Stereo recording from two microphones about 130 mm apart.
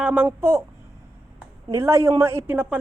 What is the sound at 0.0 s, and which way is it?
Speech, 10° right (ahead or behind).